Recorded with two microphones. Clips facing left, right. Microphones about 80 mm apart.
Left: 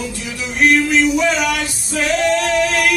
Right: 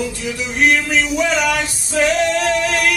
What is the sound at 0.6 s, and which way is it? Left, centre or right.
Singing, centre.